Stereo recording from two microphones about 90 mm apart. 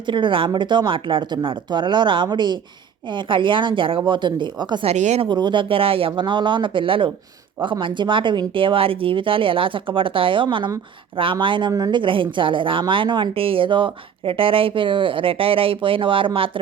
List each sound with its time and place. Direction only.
0.0 s speech: 65° right (ahead or behind)
4.8 s a woman's voice: 85° right
5.4 s speech: 60° right (ahead or behind); by 16.5 s 80° right